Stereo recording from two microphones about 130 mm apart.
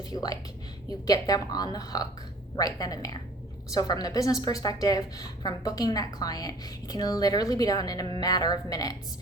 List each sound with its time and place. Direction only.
0.1 s a woman's voice: 30° left (ahead or behind)